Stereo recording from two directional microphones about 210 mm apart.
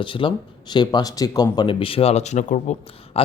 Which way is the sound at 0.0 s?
25° left (ahead or behind).